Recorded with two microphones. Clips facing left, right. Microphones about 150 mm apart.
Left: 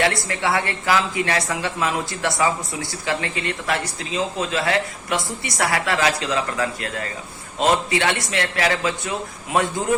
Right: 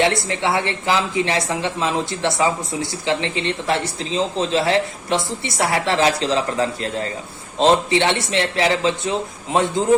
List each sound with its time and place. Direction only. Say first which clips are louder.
0.0 s speech: right 3 dB; 25° right (ahead or behind)